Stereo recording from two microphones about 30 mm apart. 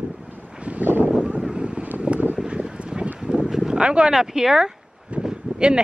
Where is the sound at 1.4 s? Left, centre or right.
Right.